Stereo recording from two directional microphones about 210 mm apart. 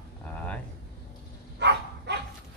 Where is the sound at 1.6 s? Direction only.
55° right (ahead or behind).